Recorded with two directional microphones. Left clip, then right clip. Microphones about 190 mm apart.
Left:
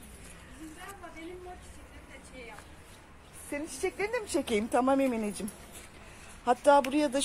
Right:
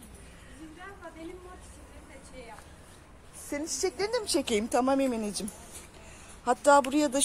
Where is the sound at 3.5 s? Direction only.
10° right (ahead or behind).